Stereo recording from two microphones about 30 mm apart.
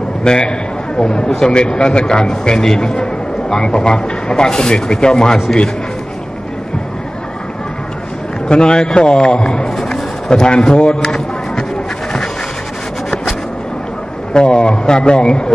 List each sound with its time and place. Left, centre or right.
0.2 s a man's voice: left
8.5 s a man's voice: left
11.0 s a sound: left
14.3 s a man's voice: left